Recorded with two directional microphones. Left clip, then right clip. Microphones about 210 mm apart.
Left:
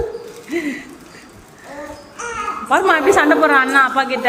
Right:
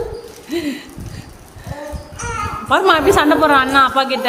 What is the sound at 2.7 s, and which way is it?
A woman's voice, 15° right (ahead or behind).